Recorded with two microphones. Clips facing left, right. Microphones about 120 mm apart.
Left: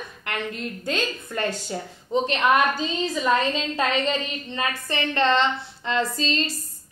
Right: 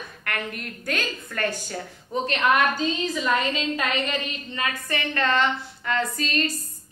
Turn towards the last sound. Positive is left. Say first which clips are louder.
# left 1 dB
turn(degrees=25)  # may be behind; listen again after turning